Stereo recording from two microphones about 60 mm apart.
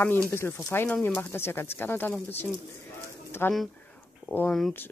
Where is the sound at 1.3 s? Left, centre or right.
Left.